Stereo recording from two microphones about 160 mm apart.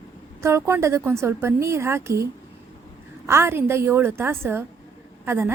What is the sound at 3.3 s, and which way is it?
A woman's voice, 15° right (ahead or behind).